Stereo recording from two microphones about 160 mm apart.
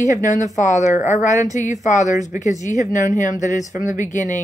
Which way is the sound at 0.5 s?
50° left (ahead or behind).